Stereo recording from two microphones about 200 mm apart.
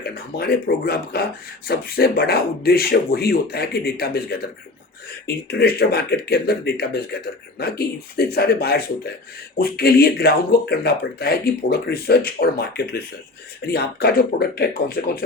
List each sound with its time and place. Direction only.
0.0 s speech: 50° left (ahead or behind)